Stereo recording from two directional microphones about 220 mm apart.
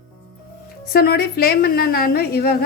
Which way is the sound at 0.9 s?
45° left (ahead or behind).